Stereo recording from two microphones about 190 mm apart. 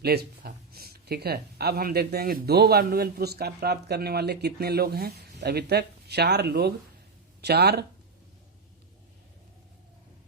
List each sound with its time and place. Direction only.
0.0 s speech: 55° right (ahead or behind)